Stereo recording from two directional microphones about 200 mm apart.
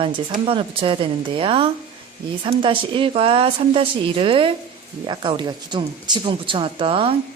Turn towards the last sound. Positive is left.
turn(degrees=-25)  # may be behind; listen again after turning